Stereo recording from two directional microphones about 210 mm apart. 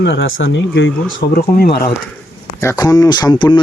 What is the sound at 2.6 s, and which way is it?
Speech, 15° left (ahead or behind).